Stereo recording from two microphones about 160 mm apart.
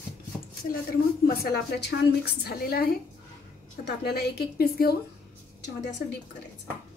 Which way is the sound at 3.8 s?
85° left.